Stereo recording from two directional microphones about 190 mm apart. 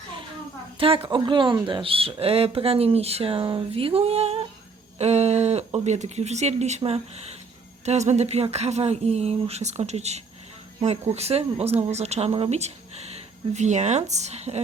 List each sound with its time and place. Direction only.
0.8 s speech: 30° right (ahead or behind)